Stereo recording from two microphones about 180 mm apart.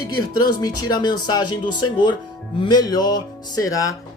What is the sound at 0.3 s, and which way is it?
Speech, 25° left (ahead or behind).